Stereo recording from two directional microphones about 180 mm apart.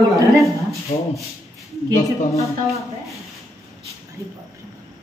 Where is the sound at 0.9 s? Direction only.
45° left (ahead or behind).